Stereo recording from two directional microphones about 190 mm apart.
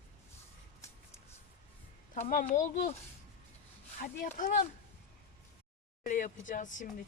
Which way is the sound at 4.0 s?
45° left (ahead or behind).